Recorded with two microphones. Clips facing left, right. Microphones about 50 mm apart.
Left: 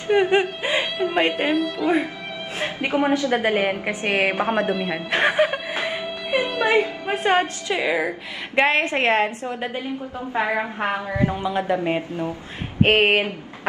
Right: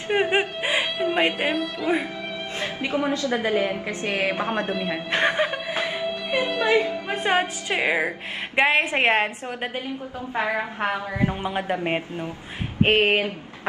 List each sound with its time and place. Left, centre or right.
0.1 s speech: centre
2.6 s a woman's voice: left
4.4 s a woman's voice: centre
7.6 s a woman's voice: right
8.5 s a woman's voice: centre
8.9 s a man's voice: right
10.8 s speech: centre
11.2 s a man's voice: right
12.8 s a woman's voice: left